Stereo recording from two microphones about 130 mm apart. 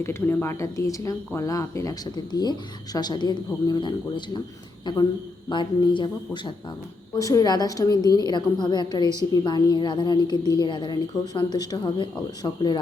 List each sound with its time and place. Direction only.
0.0 s a woman's voice: 15° left (ahead or behind); by 12.8 s 35° left (ahead or behind)